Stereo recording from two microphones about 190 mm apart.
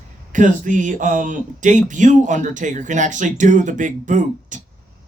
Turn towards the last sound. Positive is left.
turn(degrees=-40)  # may be behind; listen again after turning